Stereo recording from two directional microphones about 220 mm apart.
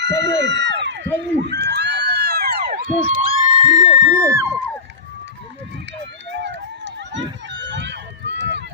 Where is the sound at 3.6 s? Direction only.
15° right (ahead or behind).